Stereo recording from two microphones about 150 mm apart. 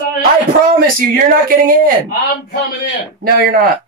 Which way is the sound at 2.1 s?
90° left.